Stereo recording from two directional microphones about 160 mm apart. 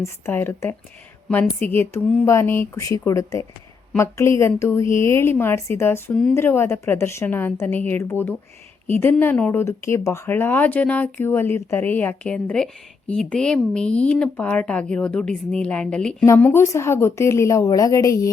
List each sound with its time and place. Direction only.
0.0 s speech: 15° left (ahead or behind)
16.2 s speech: 15° left (ahead or behind)